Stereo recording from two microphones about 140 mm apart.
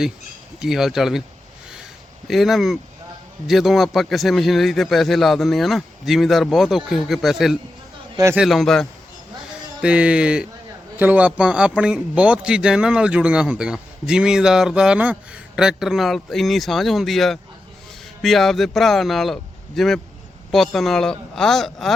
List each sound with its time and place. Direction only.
0.6 s a man's voice: centre (ahead or behind)
2.2 s a man's voice: centre (ahead or behind)
8.1 s a man's voice: 20° right (ahead or behind)
8.4 s a man's voice: centre (ahead or behind)
9.8 s a man's voice: 10° right (ahead or behind)